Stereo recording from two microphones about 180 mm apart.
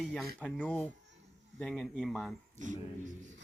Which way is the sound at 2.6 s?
45° right (ahead or behind).